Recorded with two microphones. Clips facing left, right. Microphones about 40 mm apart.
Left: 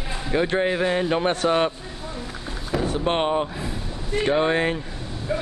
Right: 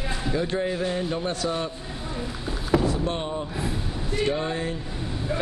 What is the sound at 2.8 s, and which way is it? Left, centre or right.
Speech, left.